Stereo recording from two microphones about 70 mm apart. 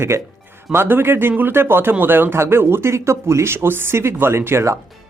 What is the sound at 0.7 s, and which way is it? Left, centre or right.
Speech, right.